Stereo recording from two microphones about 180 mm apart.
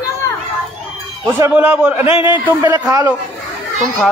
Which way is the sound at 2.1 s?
30° left (ahead or behind).